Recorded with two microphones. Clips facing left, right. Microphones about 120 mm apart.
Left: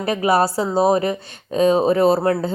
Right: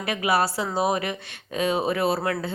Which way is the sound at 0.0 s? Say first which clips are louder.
Left 6 dB; 40° left (ahead or behind).